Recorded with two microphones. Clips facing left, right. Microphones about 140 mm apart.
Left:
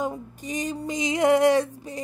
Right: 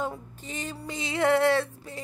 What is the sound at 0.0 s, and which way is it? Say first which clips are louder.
Music: left 4 dB; 15° left (ahead or behind).